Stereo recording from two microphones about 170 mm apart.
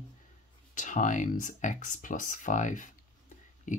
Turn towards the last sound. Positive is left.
turn(degrees=50)  # may be behind; listen again after turning